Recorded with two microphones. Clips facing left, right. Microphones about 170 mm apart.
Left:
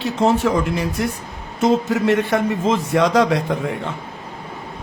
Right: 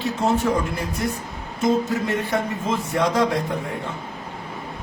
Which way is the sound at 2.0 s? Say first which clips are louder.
Left 6 dB; 75° left (ahead or behind).